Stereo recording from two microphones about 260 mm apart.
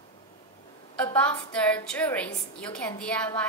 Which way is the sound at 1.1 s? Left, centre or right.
Centre.